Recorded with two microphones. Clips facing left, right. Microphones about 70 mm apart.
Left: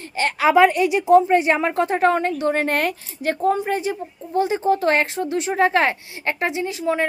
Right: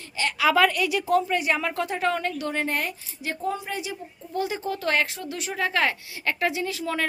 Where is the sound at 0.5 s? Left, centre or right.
Left.